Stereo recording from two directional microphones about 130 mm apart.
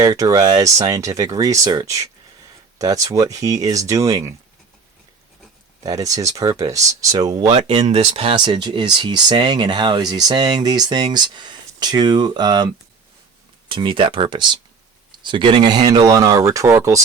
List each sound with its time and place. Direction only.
0.0 s speech: 25° right (ahead or behind)
5.8 s speech: 25° right (ahead or behind)
7.5 s speech: 55° right (ahead or behind); by 16.7 s 25° right (ahead or behind)